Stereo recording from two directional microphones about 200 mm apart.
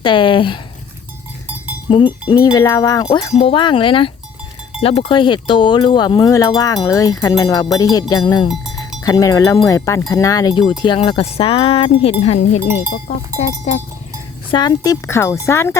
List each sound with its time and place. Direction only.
0.0 s speech: 25° left (ahead or behind)
1.9 s speech: 25° left (ahead or behind)
14.5 s speech: 20° left (ahead or behind)